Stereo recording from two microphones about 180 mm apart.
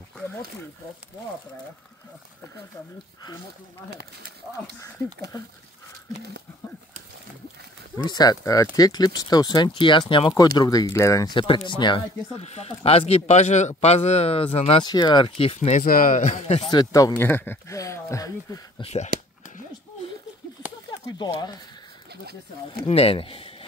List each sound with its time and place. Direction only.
8.0 s speech: 25° left (ahead or behind)
11.3 s speech: 25° left (ahead or behind)
15.8 s a man's voice: 50° left (ahead or behind)
16.7 s speech: 20° left (ahead or behind)
18.8 s speech: 35° left (ahead or behind)
21.0 s speech: 20° left (ahead or behind)
22.8 s speech: 35° left (ahead or behind)